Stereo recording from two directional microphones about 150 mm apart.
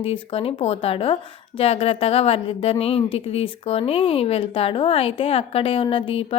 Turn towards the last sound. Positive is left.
turn(degrees=35)  # may be behind; listen again after turning